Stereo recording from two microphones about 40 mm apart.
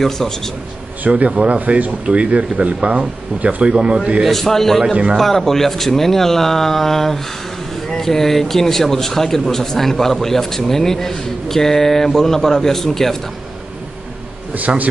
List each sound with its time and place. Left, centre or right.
1.1 s speech: right
4.2 s a man's voice: centre